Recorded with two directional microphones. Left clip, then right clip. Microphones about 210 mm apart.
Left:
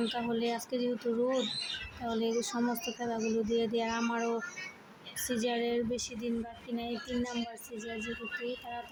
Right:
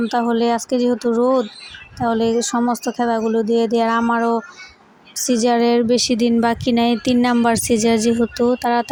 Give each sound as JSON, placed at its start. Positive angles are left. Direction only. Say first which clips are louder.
{"t": 0.1, "sound": "speech", "louder": "right 16 dB", "side_deg": -35}